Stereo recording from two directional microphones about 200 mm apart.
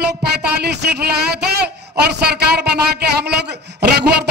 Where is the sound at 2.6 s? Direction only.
55° right (ahead or behind).